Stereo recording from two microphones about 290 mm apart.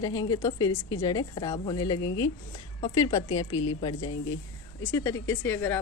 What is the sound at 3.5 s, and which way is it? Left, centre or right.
Speech, left.